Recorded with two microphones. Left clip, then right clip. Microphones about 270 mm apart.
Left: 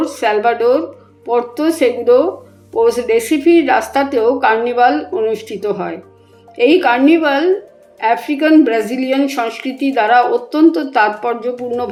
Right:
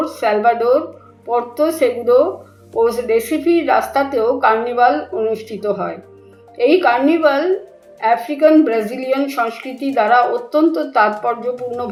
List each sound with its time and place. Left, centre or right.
0.0 s a woman's voice: left